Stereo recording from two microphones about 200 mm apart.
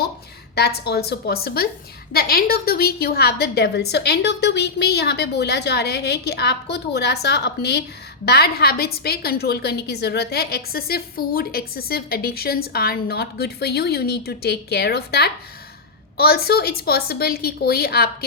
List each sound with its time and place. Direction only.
0.5 s a woman's voice: 55° left (ahead or behind)